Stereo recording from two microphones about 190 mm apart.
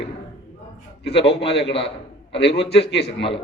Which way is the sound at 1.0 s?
65° left (ahead or behind).